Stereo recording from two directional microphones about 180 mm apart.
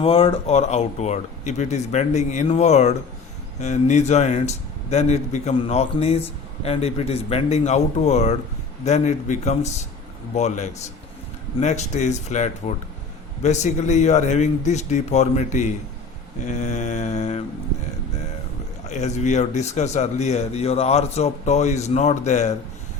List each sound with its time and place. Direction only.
0.0 s a man's voice: 30° left (ahead or behind)
18.9 s a man's voice: 40° left (ahead or behind)